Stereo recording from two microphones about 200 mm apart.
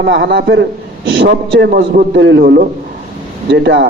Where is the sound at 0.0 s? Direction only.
60° right (ahead or behind).